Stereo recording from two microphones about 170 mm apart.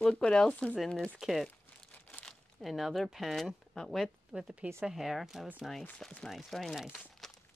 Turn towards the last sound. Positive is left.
turn(degrees=5)  # may be behind; listen again after turning